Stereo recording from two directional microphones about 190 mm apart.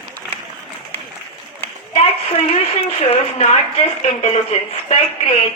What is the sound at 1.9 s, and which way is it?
A woman's voice, 30° left (ahead or behind).